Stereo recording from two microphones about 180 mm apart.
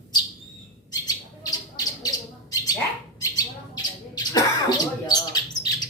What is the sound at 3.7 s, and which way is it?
Bird, 20° left (ahead or behind).